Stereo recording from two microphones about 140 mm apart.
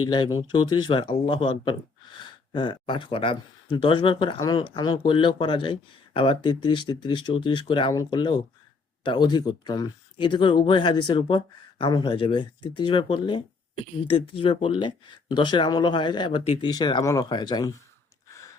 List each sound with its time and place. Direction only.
0.0 s speech: 30° left (ahead or behind)